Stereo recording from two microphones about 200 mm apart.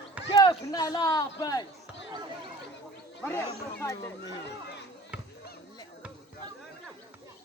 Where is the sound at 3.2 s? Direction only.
10° left (ahead or behind).